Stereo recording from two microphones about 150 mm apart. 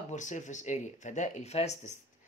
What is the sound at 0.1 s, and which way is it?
Speech, 55° left (ahead or behind).